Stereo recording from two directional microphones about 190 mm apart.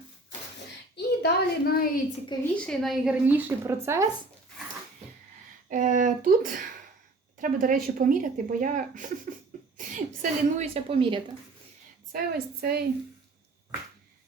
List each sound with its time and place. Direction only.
0.9 s a woman's voice: 55° left (ahead or behind)
2.6 s a woman's voice: centre (ahead or behind); by 4.1 s 15° right (ahead or behind)
5.6 s a woman's voice: 40° right (ahead or behind)
12.1 s a woman's voice: 55° right (ahead or behind)